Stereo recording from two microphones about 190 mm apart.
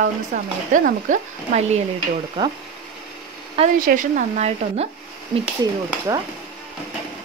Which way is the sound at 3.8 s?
40° right (ahead or behind).